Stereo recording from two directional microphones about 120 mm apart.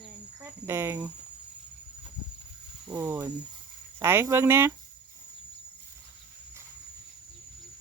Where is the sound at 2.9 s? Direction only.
25° right (ahead or behind).